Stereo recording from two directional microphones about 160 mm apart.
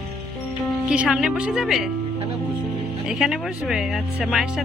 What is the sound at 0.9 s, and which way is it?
Speech, 5° right (ahead or behind).